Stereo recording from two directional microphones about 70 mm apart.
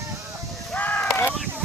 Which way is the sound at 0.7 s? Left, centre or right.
Left.